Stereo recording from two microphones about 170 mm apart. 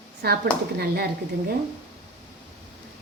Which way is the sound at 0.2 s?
70° right (ahead or behind).